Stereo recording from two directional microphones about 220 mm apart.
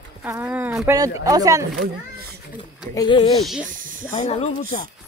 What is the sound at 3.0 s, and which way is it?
Speech, 20° left (ahead or behind).